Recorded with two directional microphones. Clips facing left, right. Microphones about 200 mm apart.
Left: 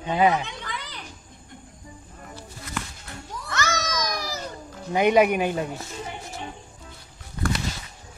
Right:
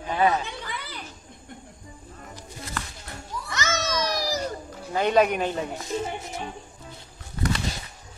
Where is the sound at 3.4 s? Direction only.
20° right (ahead or behind); by 4.4 s 35° right (ahead or behind).